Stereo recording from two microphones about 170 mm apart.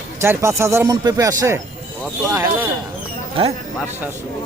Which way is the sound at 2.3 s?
15° right (ahead or behind).